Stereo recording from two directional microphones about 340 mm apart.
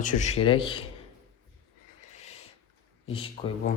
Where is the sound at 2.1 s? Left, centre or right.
Centre.